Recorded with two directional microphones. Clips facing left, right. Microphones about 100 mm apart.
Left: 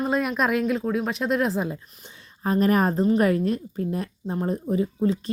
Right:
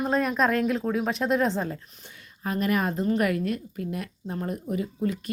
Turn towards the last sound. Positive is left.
turn(degrees=30)  # may be behind; listen again after turning